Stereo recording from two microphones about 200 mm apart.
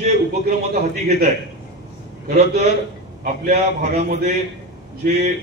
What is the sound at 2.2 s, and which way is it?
A man's voice, 35° right (ahead or behind).